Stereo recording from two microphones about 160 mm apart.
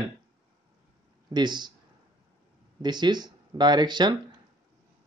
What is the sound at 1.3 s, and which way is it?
Speech, 25° right (ahead or behind).